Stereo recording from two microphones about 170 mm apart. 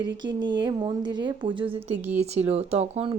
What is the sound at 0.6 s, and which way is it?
Speech, 25° right (ahead or behind).